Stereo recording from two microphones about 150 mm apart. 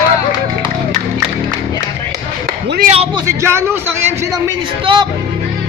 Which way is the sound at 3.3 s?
15° right (ahead or behind).